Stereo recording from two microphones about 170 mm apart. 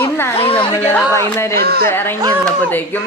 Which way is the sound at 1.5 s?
70° right (ahead or behind).